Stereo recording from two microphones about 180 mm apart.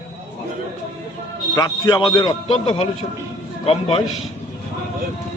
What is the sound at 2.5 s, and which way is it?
A man's voice, 35° left (ahead or behind).